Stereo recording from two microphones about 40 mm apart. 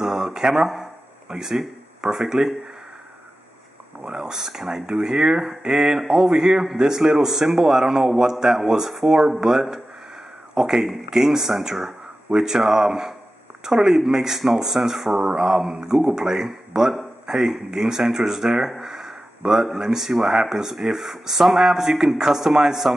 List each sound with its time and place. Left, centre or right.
0.0 s a sound: centre
1.3 s speech: centre
4.1 s speech: centre